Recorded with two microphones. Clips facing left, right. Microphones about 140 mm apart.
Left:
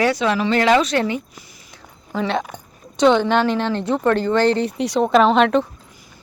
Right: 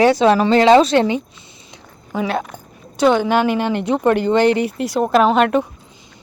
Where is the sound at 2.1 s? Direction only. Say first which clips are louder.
Right 1 dB; 5° right (ahead or behind).